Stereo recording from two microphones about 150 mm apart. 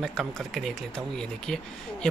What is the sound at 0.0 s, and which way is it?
A man's voice, centre (ahead or behind).